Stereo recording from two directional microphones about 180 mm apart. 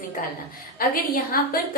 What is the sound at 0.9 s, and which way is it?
Speech, 55° left (ahead or behind).